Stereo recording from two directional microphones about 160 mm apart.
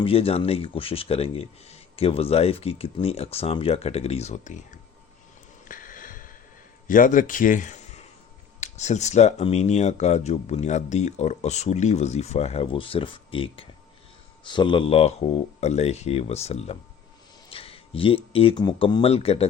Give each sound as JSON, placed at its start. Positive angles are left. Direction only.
{"t": 0.0, "sound": "speech", "side_deg": 35}
{"t": 5.6, "sound": "a sound", "side_deg": 55}
{"t": 6.8, "sound": "a man's voice", "side_deg": 55}